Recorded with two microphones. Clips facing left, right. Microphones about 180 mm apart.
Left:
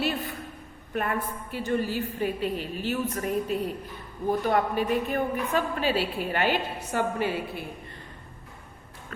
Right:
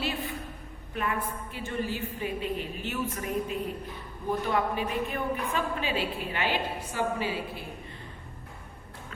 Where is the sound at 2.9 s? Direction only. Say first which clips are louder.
Left 5 dB; 35° left (ahead or behind).